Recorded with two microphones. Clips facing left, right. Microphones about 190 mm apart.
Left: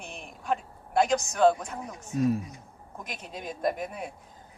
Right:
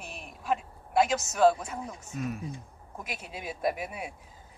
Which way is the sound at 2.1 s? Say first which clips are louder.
Left 9 dB; 30° left (ahead or behind).